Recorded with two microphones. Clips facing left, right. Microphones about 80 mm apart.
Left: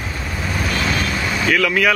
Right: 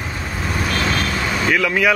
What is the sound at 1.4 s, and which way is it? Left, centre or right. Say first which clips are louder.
Speech: left 1 dB; centre.